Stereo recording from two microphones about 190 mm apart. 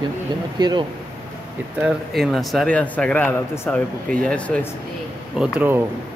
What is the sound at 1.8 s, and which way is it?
Speech, 5° right (ahead or behind).